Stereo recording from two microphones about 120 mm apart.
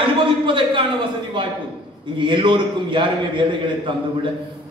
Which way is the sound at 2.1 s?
45° right (ahead or behind).